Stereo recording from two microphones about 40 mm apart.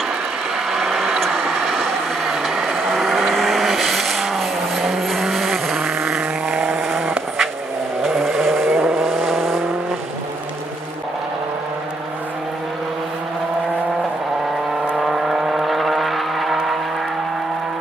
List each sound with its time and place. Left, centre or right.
0.7 s a sound: centre
1.7 s vehicle: centre
5.8 s vehicle: centre
6.8 s vehicle: centre
8.6 s vehicle: right
8.9 s vehicle: centre
15.0 s vehicle: centre